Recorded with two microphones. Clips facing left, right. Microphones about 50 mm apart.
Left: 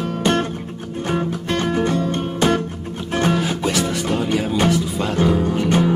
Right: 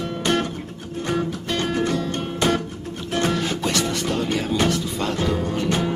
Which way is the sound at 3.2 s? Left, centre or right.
Centre.